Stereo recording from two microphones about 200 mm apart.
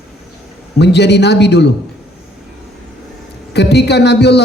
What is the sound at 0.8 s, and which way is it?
Speech, 55° left (ahead or behind).